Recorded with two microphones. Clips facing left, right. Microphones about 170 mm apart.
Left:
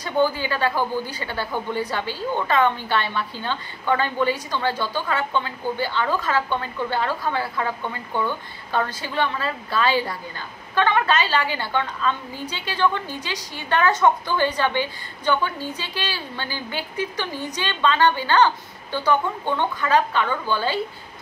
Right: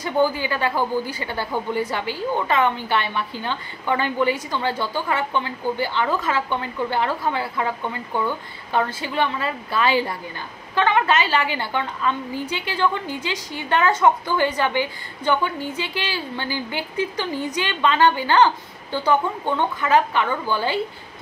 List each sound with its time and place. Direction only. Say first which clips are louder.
0.2 s a woman's voice: even; 15° right (ahead or behind)